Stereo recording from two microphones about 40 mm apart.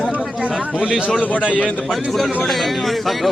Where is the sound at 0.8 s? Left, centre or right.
Right.